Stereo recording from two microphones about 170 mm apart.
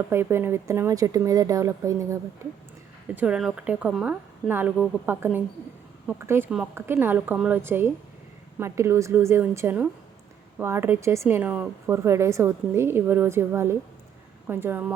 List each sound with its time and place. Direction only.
0.1 s a woman's voice: 15° right (ahead or behind)
3.2 s a woman's voice: 5° right (ahead or behind)